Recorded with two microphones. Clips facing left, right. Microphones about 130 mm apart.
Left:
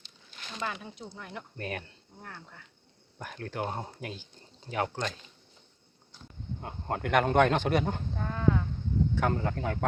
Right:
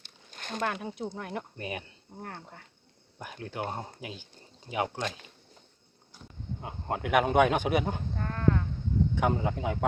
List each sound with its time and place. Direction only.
0.0 s a sound: 50° right (ahead or behind)
1.1 s speech: 50° right (ahead or behind)
1.5 s speech: 10° right (ahead or behind)
2.2 s speech: 50° right (ahead or behind)
3.2 s speech: 5° right (ahead or behind)
6.6 s speech: 5° right (ahead or behind)
8.2 s a sound: 5° left (ahead or behind)
9.1 s speech: 10° right (ahead or behind)